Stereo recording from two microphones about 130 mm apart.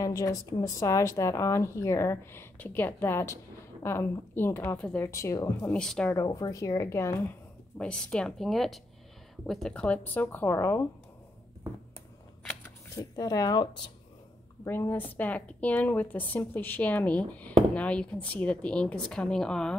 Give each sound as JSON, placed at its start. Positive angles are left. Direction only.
{"t": 0.0, "sound": "a woman's voice", "side_deg": 25}
{"t": 4.7, "sound": "speech", "side_deg": 5}
{"t": 5.0, "sound": "a woman's voice", "side_deg": 20}
{"t": 5.7, "sound": "speech", "side_deg": 5}
{"t": 6.1, "sound": "a woman's voice", "side_deg": 25}
{"t": 7.7, "sound": "speech", "side_deg": 5}
{"t": 12.6, "sound": "speech", "side_deg": 25}